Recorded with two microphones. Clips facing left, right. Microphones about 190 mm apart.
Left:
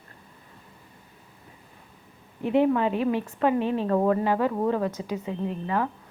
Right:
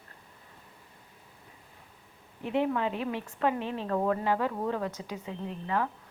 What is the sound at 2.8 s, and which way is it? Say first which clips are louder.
Speech: left 7 dB; 50° left (ahead or behind).